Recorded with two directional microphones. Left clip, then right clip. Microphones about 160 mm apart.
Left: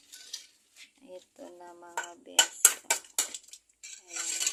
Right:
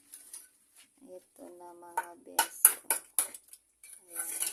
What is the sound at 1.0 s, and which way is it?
Speech, 5° right (ahead or behind).